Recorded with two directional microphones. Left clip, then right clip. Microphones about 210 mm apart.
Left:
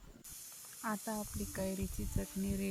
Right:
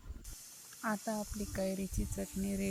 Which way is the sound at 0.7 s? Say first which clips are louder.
Right 3 dB; 15° right (ahead or behind).